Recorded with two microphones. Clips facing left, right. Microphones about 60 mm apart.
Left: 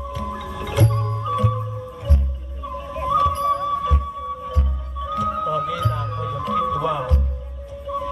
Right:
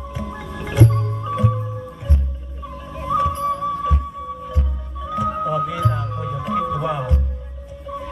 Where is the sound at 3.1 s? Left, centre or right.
Centre.